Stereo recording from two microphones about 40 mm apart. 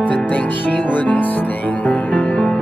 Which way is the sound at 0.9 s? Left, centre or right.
Left.